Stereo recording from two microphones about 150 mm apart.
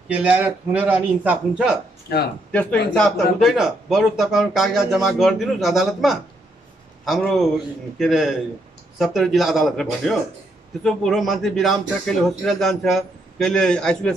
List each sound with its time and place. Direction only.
0.1 s a man's voice: 10° right (ahead or behind)
2.5 s a man's voice: 5° left (ahead or behind)